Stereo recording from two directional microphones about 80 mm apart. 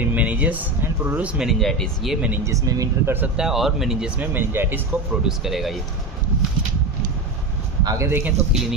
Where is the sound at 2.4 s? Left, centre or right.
Right.